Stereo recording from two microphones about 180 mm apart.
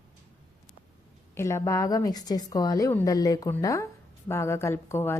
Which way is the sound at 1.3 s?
15° left (ahead or behind).